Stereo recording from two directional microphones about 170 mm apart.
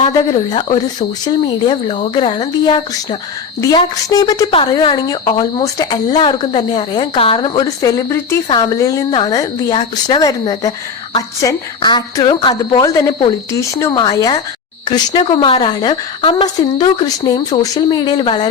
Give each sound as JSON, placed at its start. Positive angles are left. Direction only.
{"t": 0.0, "sound": "a woman's voice", "side_deg": 25}